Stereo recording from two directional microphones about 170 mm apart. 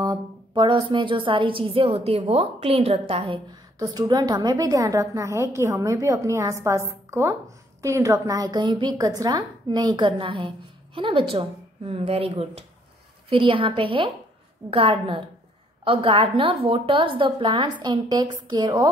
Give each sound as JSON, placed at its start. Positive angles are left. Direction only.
{"t": 0.0, "sound": "a woman's voice", "side_deg": -25}
{"t": 3.8, "sound": "a woman's voice", "side_deg": -20}